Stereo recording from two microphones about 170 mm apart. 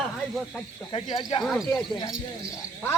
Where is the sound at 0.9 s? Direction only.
25° left (ahead or behind).